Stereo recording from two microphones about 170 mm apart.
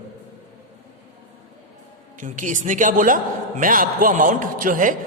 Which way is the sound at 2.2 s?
50° right (ahead or behind).